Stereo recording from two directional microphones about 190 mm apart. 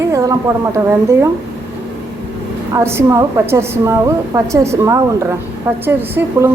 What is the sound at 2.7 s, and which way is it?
A woman's voice, 15° right (ahead or behind).